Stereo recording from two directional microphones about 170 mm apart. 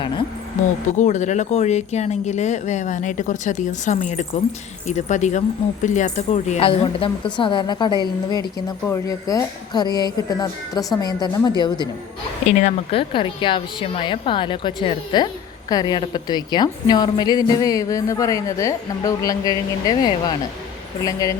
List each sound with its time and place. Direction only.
0.6 s a woman's voice: 45° left (ahead or behind); by 11.9 s 25° left (ahead or behind)
12.5 s a woman's voice: 40° left (ahead or behind); by 21.3 s 20° left (ahead or behind)